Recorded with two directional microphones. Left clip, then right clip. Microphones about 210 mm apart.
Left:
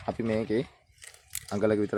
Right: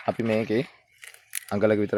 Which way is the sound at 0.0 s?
45° right (ahead or behind).